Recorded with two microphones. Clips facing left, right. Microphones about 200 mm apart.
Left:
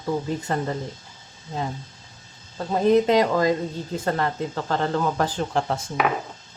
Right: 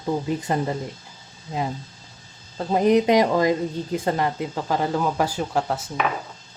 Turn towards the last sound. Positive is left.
turn(degrees=0)  # may be behind; listen again after turning